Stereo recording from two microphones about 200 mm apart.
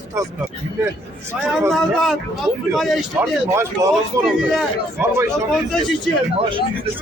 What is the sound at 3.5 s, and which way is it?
Speech, 15° right (ahead or behind).